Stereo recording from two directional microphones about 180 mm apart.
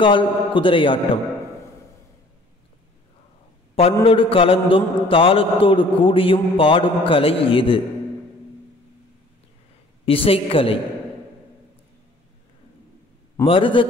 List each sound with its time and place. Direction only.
0.0 s a man's voice: 30° left (ahead or behind)
4.0 s a man's voice: 30° left (ahead or behind)
10.0 s a woman's voice: 30° left (ahead or behind)
13.5 s a man's voice: 30° left (ahead or behind)